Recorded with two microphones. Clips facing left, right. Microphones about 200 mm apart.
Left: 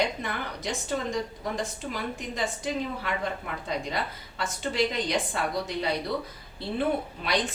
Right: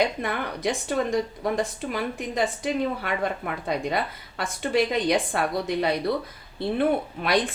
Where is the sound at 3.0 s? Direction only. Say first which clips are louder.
Right 4 dB; 60° right (ahead or behind).